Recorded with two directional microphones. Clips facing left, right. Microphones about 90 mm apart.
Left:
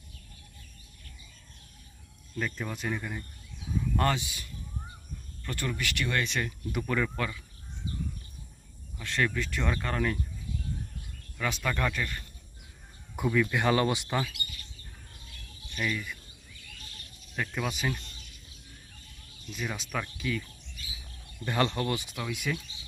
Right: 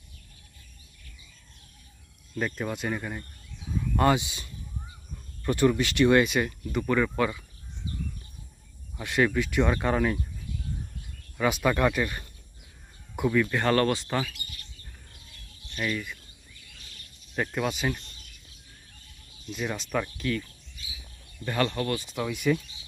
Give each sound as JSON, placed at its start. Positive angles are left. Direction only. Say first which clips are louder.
{"t": 2.3, "sound": "speech", "louder": "right 4 dB", "side_deg": -5}
{"t": 4.1, "sound": "speech", "louder": "right 7 dB", "side_deg": -20}
{"t": 6.7, "sound": "speech", "louder": "right 5 dB", "side_deg": 0}
{"t": 9.0, "sound": "speech", "louder": "right 5 dB", "side_deg": -10}
{"t": 11.3, "sound": "speech", "louder": "right 7 dB", "side_deg": -15}
{"t": 13.1, "sound": "speech", "louder": "right 2 dB", "side_deg": 0}
{"t": 13.5, "sound": "speech", "louder": "right 2 dB", "side_deg": 10}
{"t": 14.1, "sound": "speech", "louder": "right 2 dB", "side_deg": 0}
{"t": 15.7, "sound": "speech", "louder": "right 2 dB", "side_deg": -5}
{"t": 17.5, "sound": "speech", "louder": "right 3 dB", "side_deg": 0}
{"t": 19.5, "sound": "speech", "louder": "right 4 dB", "side_deg": 0}
{"t": 21.4, "sound": "speech", "louder": "right 1 dB", "side_deg": 15}
{"t": 22.1, "sound": "speech", "louder": "right 7 dB", "side_deg": 0}